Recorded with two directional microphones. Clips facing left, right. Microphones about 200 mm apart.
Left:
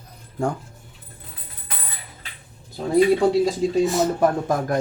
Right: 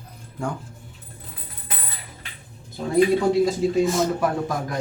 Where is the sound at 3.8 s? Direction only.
Centre (ahead or behind).